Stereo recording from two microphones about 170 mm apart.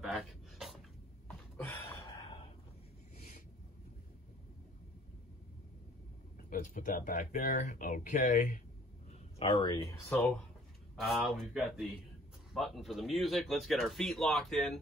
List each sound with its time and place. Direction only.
0.0 s dog: centre (ahead or behind)
1.6 s a sound: 15° left (ahead or behind)
3.2 s a sound: 45° left (ahead or behind)
6.5 s speech: 55° left (ahead or behind)
9.4 s speech: 30° left (ahead or behind)
11.0 s speech: centre (ahead or behind)